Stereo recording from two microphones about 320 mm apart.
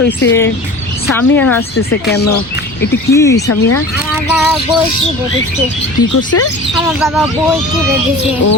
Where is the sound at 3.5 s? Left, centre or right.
Left.